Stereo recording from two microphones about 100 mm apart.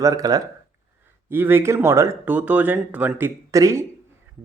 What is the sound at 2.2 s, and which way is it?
Speech, 15° right (ahead or behind).